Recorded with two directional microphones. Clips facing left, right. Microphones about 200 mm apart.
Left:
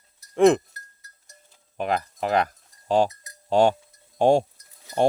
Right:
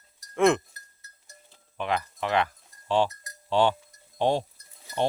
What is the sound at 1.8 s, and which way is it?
Speech, 40° left (ahead or behind).